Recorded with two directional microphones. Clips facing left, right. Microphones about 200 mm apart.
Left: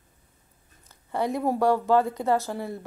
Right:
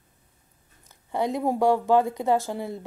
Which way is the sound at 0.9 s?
20° right (ahead or behind).